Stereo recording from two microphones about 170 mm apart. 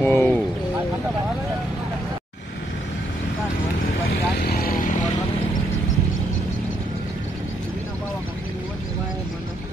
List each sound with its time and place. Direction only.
0.0 s speech: 10° left (ahead or behind)
4.4 s vehicle: 60° left (ahead or behind)